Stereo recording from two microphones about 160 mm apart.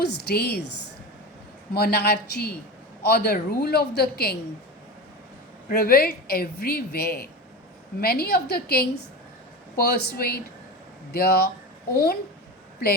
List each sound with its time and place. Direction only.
0.0 s a woman's voice: 90° left
1.7 s a man's voice: 85° left
5.6 s a woman's voice: 65° left (ahead or behind)